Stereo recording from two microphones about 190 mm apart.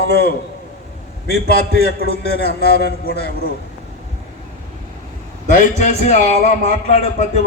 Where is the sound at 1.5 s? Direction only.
55° left (ahead or behind).